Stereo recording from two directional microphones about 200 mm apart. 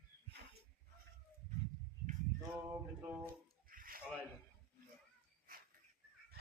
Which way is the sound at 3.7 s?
45° right (ahead or behind).